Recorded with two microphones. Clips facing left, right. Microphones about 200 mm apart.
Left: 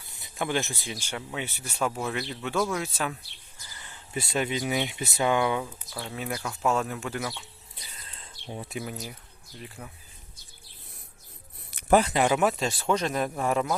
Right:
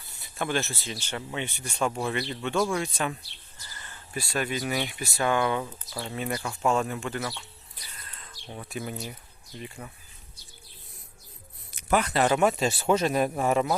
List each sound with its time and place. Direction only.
0.2 s speech: 15° left (ahead or behind)
3.8 s speech: 15° left (ahead or behind)
5.6 s speech: centre (ahead or behind)
7.8 s a sound: 30° left (ahead or behind)
8.4 s speech: 20° left (ahead or behind)
8.8 s speech: centre (ahead or behind)
12.1 s speech: 10° left (ahead or behind)